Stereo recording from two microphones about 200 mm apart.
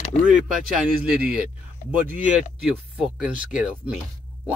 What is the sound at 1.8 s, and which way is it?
Speech, 40° left (ahead or behind).